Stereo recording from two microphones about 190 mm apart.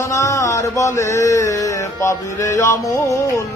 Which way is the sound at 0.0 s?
15° left (ahead or behind).